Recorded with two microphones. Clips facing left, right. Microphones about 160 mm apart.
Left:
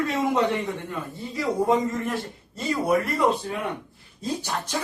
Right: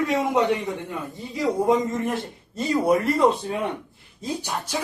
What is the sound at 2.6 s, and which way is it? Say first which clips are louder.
Speech: right 3 dB; 30° right (ahead or behind).